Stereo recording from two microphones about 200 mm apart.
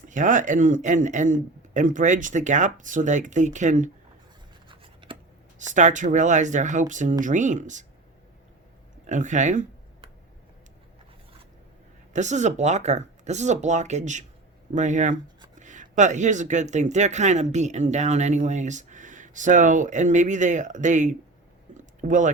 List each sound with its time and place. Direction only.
0.1 s speech: 40° right (ahead or behind)
4.7 s scratch: 25° right (ahead or behind)
5.5 s speech: 40° right (ahead or behind)
9.0 s speech: 40° right (ahead or behind)
12.1 s speech: 35° right (ahead or behind)